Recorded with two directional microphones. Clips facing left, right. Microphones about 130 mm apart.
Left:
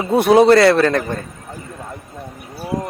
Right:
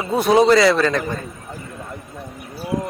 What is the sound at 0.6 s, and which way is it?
Speech, 60° left (ahead or behind).